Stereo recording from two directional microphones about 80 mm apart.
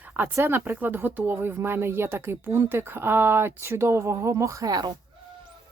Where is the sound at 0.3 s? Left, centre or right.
Right.